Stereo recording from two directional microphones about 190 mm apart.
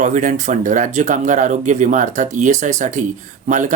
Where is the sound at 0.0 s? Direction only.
40° right (ahead or behind).